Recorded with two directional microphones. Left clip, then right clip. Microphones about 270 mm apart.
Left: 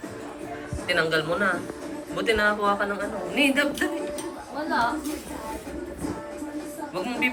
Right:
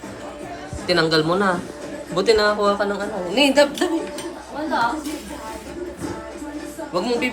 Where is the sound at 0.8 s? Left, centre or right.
Centre.